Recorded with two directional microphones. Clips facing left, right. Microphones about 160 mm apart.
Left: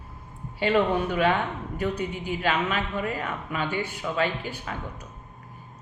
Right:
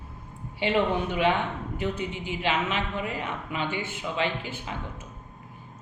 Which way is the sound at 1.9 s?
40° left (ahead or behind).